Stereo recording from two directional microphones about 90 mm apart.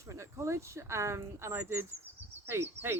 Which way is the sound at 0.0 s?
35° right (ahead or behind).